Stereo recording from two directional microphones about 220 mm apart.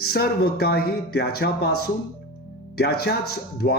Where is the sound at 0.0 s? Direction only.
45° left (ahead or behind).